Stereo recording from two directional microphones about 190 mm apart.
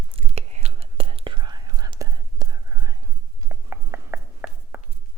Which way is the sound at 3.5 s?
15° right (ahead or behind).